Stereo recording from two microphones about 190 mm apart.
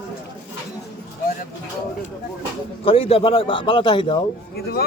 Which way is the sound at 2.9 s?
30° left (ahead or behind).